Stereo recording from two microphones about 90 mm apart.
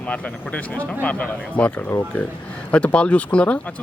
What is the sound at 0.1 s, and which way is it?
Speech, 15° left (ahead or behind).